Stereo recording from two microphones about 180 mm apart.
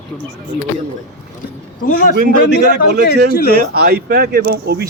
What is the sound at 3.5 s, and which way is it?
Speech, 60° right (ahead or behind).